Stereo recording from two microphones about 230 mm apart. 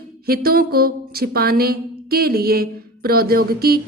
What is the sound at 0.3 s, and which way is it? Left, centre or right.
Speech, right.